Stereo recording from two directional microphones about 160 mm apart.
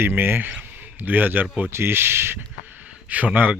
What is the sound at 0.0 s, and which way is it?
Speech, 15° right (ahead or behind).